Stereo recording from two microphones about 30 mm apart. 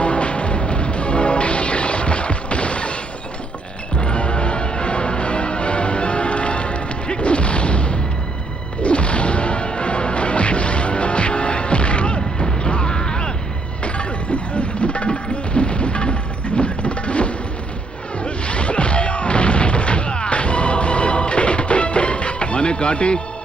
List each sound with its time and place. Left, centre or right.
0.0 s music: left
8.8 s whip: left
12.5 s a sound: left
13.8 s music: left
16.6 s a sound: left
18.2 s music: left